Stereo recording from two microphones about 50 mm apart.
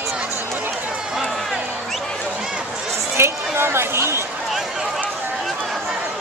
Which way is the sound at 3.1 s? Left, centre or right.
Right.